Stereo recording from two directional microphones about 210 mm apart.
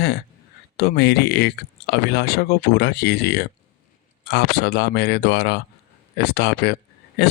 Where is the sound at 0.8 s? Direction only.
50° left (ahead or behind).